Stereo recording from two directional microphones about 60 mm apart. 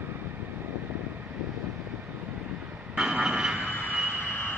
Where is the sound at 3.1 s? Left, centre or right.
Centre.